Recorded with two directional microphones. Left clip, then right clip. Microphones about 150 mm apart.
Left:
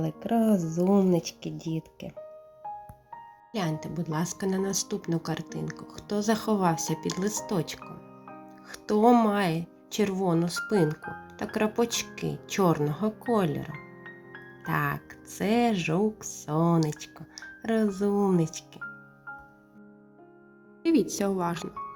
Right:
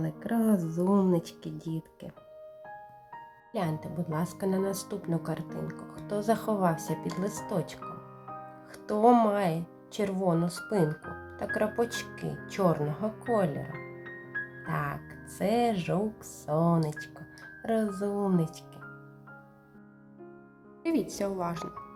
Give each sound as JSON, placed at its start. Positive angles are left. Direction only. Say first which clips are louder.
{"t": 0.3, "sound": "speech", "louder": "left 3 dB", "side_deg": 5}
{"t": 1.1, "sound": "speech", "louder": "left 3 dB", "side_deg": -35}
{"t": 1.5, "sound": "speech", "louder": "left 3 dB", "side_deg": 15}
{"t": 3.5, "sound": "speech", "louder": "left 1 dB", "side_deg": 15}
{"t": 8.7, "sound": "music", "louder": "left 1 dB", "side_deg": 15}
{"t": 9.2, "sound": "speech", "louder": "left 1 dB", "side_deg": 20}
{"t": 14.7, "sound": "speech", "louder": "left 7 dB", "side_deg": 20}
{"t": 20.8, "sound": "speech", "louder": "left 5 dB", "side_deg": 20}